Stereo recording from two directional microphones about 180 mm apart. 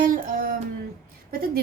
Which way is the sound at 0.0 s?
50° right (ahead or behind).